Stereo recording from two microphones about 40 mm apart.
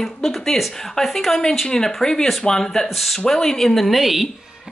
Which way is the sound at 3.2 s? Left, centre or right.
Centre.